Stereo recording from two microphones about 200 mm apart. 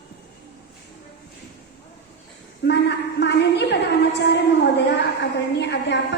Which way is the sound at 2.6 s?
60° left (ahead or behind).